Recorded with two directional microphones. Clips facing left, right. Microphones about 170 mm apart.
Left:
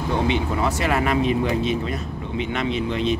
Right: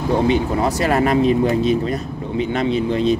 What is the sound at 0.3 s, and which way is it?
Speech, 40° right (ahead or behind).